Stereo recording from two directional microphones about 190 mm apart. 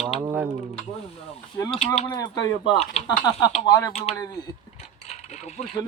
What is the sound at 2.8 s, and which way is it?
Speech, 35° left (ahead or behind).